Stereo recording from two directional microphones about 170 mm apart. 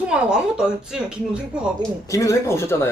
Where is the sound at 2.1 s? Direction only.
20° left (ahead or behind).